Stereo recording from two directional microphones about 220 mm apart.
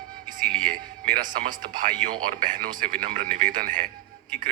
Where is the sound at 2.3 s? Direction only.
35° right (ahead or behind).